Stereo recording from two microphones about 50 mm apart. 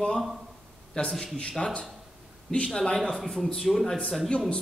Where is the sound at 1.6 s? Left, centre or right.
Centre.